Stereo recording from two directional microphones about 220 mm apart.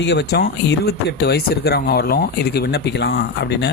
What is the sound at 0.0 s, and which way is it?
Speech, 50° left (ahead or behind).